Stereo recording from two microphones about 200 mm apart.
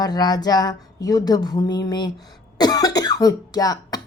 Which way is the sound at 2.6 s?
20° left (ahead or behind).